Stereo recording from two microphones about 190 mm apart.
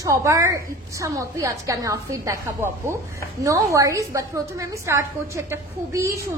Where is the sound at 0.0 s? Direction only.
15° right (ahead or behind).